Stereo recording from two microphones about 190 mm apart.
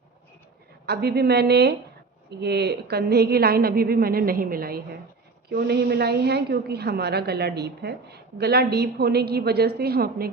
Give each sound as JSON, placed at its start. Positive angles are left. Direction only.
{"t": 0.9, "sound": "a woman's voice", "side_deg": -60}